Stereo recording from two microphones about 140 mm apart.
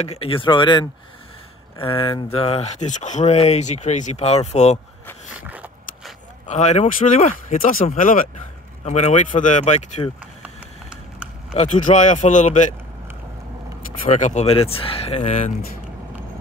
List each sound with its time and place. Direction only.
0.0 s speech: 45° left (ahead or behind)
5.3 s a sound: 10° right (ahead or behind)
6.4 s speech: 55° left (ahead or behind)
8.8 s speech: 55° left (ahead or behind)
10.4 s a sound: 5° right (ahead or behind)
11.5 s speech: 55° left (ahead or behind)
14.0 s speech: 55° left (ahead or behind)